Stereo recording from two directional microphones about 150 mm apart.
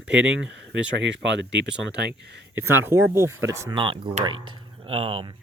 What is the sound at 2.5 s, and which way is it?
Speech, 15° right (ahead or behind).